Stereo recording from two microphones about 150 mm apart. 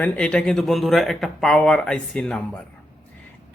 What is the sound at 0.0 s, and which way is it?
Speech, 5° left (ahead or behind).